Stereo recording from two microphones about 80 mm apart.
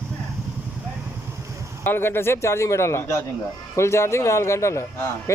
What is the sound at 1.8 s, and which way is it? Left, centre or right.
A man's voice, left.